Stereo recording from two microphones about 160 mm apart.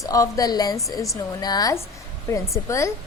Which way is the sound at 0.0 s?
20° left (ahead or behind).